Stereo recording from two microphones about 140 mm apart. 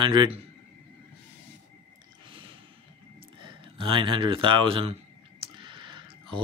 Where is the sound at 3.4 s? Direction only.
35° right (ahead or behind).